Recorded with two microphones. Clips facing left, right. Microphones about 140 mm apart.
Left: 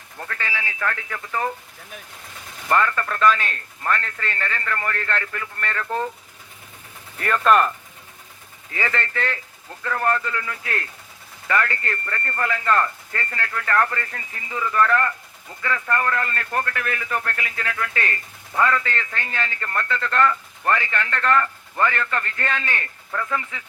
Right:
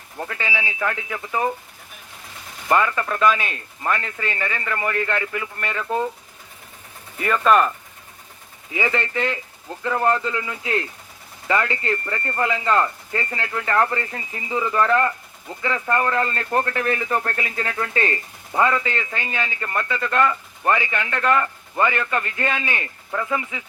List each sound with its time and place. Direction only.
0.2 s a man's voice: 15° right (ahead or behind)
2.6 s a man's voice: 10° right (ahead or behind)
7.2 s speech: 5° right (ahead or behind)
8.7 s speech: 15° right (ahead or behind)